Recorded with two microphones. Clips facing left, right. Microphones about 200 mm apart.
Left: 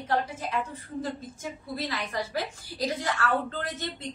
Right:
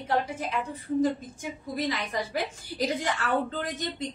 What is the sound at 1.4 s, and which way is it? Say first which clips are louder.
A woman's voice: right 4 dB; 20° right (ahead or behind).